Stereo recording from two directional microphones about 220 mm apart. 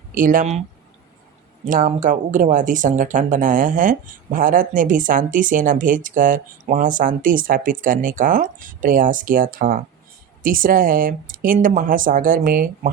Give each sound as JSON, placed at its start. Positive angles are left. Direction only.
{"t": 0.1, "sound": "speech", "side_deg": -40}
{"t": 1.6, "sound": "speech", "side_deg": -35}